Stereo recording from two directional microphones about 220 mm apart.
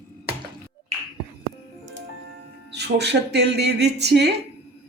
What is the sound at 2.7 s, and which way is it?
Speech, 50° right (ahead or behind).